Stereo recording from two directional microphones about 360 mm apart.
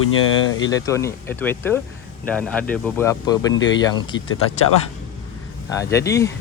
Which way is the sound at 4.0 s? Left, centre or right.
Centre.